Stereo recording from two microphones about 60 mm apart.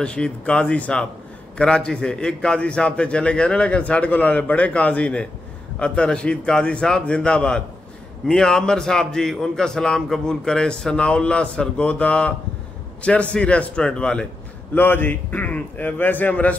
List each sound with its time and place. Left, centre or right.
0.0 s a man's voice: centre
14.7 s a man's voice: left